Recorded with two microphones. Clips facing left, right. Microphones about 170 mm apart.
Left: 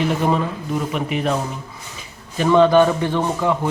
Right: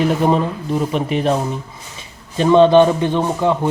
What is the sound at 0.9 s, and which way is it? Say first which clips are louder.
Speech: right 4 dB; 30° right (ahead or behind).